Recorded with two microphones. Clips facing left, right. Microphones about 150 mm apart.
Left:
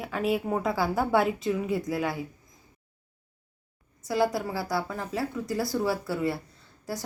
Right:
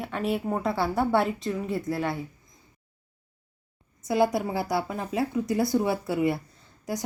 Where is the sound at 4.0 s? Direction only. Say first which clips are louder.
Right 2 dB; 20° right (ahead or behind).